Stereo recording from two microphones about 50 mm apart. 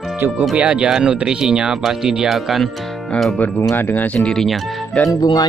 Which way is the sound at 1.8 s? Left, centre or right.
Centre.